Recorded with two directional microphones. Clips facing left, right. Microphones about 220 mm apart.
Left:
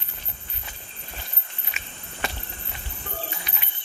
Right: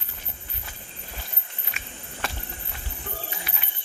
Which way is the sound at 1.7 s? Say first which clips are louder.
Even; centre (ahead or behind).